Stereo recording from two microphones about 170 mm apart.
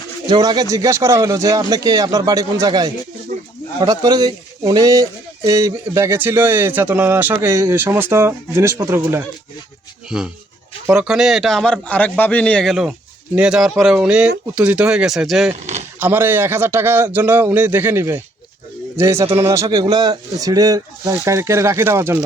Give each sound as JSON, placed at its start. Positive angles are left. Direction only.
{"t": 0.3, "sound": "speech", "side_deg": -25}
{"t": 10.1, "sound": "speech", "side_deg": -5}
{"t": 15.6, "sound": "a sound", "side_deg": -40}
{"t": 16.0, "sound": "speech", "side_deg": -10}